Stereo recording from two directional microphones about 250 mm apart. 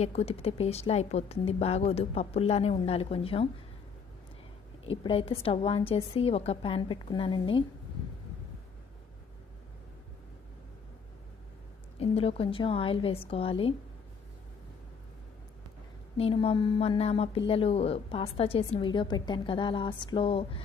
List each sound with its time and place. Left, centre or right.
0.0 s a woman's voice: left
4.8 s a woman's voice: left
12.0 s a woman's voice: left
16.2 s a woman's voice: left